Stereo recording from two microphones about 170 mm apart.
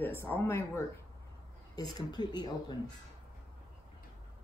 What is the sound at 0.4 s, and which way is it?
Speech, 15° left (ahead or behind).